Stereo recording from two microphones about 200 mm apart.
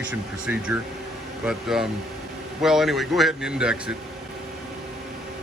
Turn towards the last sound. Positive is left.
turn(degrees=-5)  # may be behind; listen again after turning